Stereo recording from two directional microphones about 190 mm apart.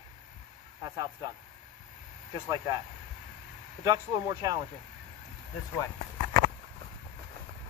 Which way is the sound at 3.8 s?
20° right (ahead or behind).